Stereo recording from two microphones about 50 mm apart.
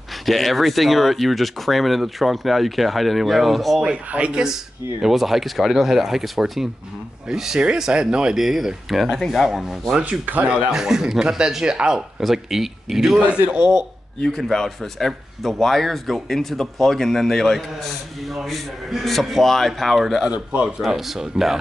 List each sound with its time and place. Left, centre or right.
0.3 s speech: centre
3.8 s speech: right
5.0 s speech: centre
8.4 s speech: centre
10.0 s speech: right
10.7 s speech: centre
14.2 s speech: centre
20.2 s speech: right
20.6 s speech: centre